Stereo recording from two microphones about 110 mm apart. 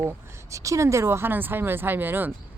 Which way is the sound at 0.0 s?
25° right (ahead or behind).